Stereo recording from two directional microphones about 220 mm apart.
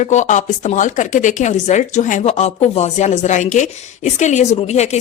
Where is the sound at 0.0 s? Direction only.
35° left (ahead or behind).